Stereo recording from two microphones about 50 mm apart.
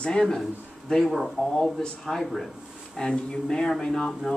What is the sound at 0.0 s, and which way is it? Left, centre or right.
Speech, centre.